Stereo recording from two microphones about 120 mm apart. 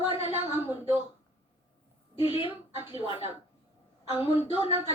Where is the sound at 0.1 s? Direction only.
55° left (ahead or behind).